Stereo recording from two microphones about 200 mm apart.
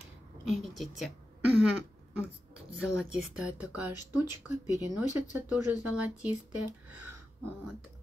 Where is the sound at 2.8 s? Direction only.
5° right (ahead or behind).